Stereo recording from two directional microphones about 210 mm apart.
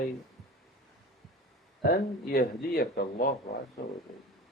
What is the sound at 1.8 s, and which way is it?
Speech, 45° left (ahead or behind).